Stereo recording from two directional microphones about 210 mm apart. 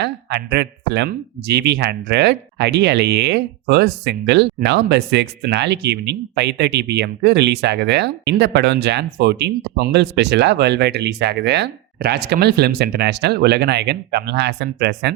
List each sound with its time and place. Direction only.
0.0 s speech: 55° right (ahead or behind)